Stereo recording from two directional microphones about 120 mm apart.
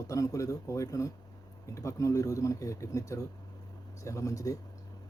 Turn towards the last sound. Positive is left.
turn(degrees=30)  # may be behind; listen again after turning